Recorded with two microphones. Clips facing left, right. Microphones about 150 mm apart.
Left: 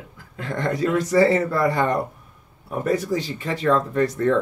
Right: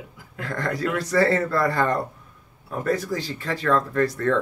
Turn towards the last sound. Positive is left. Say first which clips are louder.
# left 2 dB
turn(degrees=20)  # may be behind; listen again after turning